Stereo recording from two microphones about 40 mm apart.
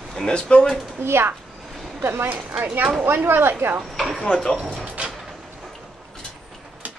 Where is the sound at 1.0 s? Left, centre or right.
Right.